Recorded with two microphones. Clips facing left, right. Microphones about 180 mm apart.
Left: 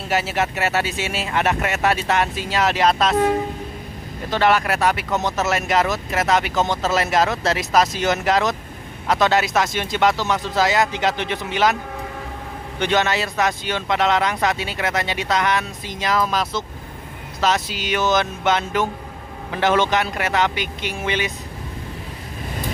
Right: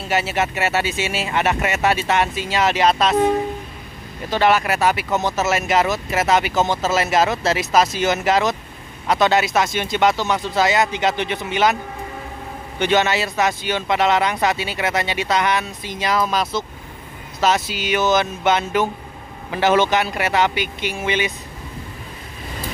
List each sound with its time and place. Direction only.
0.1 s speech: centre (ahead or behind)
4.3 s speech: centre (ahead or behind)
12.7 s speech: 5° right (ahead or behind)